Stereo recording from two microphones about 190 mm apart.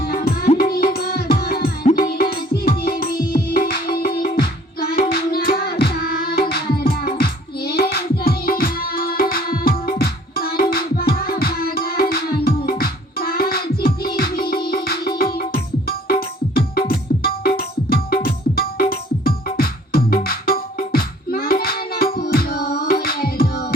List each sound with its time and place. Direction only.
0.0 s music: 50° left (ahead or behind)